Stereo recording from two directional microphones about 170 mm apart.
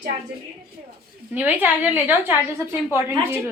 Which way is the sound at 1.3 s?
10° right (ahead or behind).